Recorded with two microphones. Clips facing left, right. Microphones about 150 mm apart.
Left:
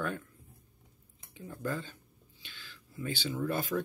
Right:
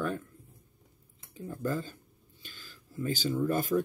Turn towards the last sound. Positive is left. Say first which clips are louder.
# right 4 dB
turn(degrees=-45)  # may be behind; listen again after turning